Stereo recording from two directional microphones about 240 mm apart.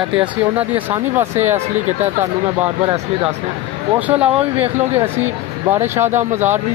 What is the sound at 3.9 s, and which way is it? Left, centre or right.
Speech, centre.